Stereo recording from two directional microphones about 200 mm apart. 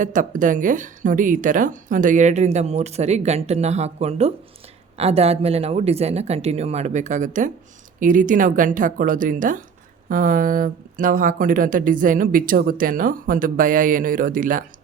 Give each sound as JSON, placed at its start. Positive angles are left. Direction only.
{"t": 0.0, "sound": "speech", "side_deg": -40}